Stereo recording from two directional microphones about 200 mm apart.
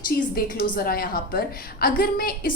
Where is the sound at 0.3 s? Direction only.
45° left (ahead or behind).